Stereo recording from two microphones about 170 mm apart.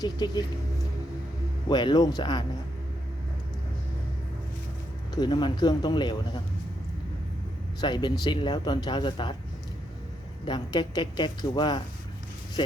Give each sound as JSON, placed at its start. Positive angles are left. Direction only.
{"t": 0.0, "sound": "speech", "side_deg": 25}
{"t": 1.7, "sound": "speech", "side_deg": 25}
{"t": 5.1, "sound": "speech", "side_deg": 25}
{"t": 7.8, "sound": "speech", "side_deg": 25}
{"t": 10.4, "sound": "speech", "side_deg": 25}